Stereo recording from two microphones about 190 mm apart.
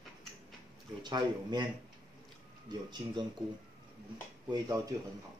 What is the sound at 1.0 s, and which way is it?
Speech, 25° right (ahead or behind).